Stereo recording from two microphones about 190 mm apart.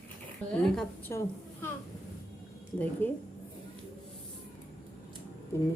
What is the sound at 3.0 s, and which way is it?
Speech, 10° left (ahead or behind).